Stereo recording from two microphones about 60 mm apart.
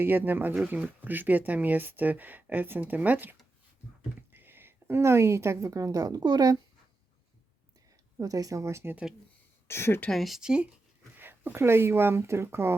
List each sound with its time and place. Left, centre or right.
0.0 s a woman's voice: right
8.2 s speech: right
8.6 s speech: right
9.6 s speech: left
10.1 s speech: centre
10.4 s speech: centre
11.2 s speech: right